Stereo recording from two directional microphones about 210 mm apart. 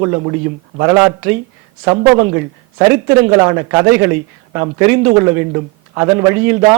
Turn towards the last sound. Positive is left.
turn(degrees=-10)  # may be behind; listen again after turning